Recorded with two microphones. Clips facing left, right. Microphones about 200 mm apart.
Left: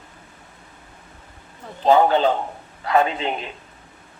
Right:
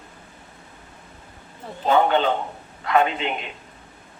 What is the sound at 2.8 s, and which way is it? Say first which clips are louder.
Speech: left 1 dB; 35° left (ahead or behind).